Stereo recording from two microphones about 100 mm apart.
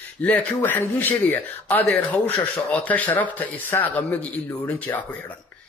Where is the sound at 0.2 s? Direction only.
15° left (ahead or behind).